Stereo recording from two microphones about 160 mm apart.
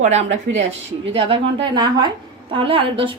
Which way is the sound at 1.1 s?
30° right (ahead or behind).